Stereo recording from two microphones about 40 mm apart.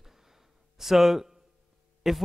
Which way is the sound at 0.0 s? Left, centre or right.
Centre.